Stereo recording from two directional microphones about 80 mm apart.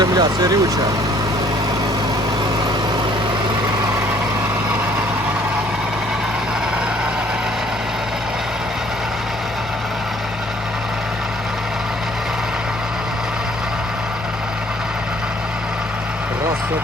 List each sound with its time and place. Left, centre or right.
0.0 s speech: right